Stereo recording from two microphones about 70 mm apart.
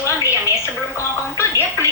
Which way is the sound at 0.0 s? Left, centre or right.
Left.